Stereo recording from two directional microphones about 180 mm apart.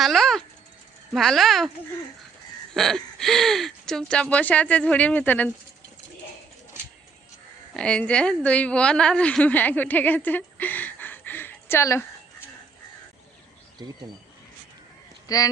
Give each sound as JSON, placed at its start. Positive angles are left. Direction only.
{"t": 0.0, "sound": "a sound", "side_deg": 0}
{"t": 1.1, "sound": "speech", "side_deg": 0}
{"t": 2.7, "sound": "speech", "side_deg": 0}
{"t": 7.7, "sound": "a woman's voice", "side_deg": 5}
{"t": 15.3, "sound": "speech", "side_deg": 20}